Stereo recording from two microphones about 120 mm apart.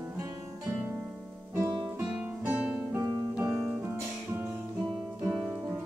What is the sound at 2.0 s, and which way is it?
Music, 10° right (ahead or behind).